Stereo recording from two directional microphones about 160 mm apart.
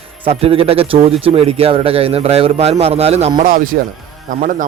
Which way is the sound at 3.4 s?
60° right (ahead or behind).